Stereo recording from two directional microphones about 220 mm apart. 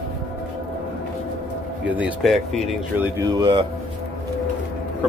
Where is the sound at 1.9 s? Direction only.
5° right (ahead or behind).